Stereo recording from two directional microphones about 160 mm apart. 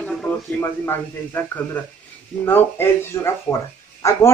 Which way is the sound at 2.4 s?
15° left (ahead or behind).